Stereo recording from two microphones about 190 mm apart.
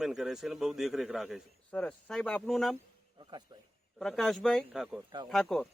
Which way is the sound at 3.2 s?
25° right (ahead or behind).